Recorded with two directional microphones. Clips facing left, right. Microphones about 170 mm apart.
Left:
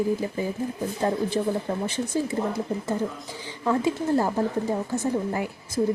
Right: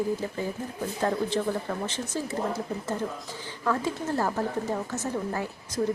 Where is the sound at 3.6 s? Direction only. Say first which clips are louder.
Left 4 dB; 15° left (ahead or behind).